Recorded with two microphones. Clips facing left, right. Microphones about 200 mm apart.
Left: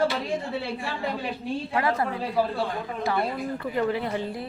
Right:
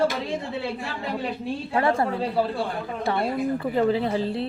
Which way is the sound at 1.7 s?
25° right (ahead or behind).